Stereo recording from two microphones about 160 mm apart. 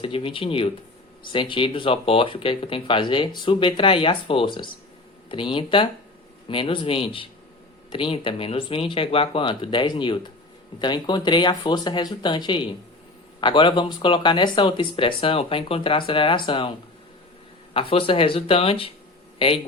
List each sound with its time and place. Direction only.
0.0 s speech: 35° left (ahead or behind)
17.7 s speech: 35° left (ahead or behind)